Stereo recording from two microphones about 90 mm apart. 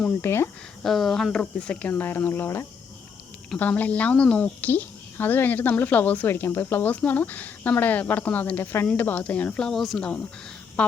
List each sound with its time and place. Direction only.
0.2 s speech: 30° left (ahead or behind)
0.8 s speech: 5° left (ahead or behind)